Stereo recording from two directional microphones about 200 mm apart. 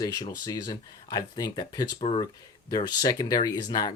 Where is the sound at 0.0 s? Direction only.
20° left (ahead or behind).